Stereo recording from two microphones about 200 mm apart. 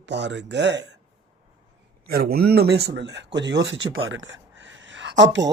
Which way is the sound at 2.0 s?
50° right (ahead or behind).